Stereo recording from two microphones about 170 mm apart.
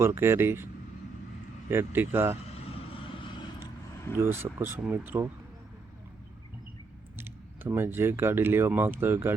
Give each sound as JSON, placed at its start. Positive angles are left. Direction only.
{"t": 0.0, "sound": "speech", "side_deg": -15}
{"t": 1.7, "sound": "speech", "side_deg": -15}
{"t": 2.9, "sound": "vehicle", "side_deg": 30}
{"t": 4.2, "sound": "speech", "side_deg": -15}
{"t": 7.2, "sound": "speech", "side_deg": -15}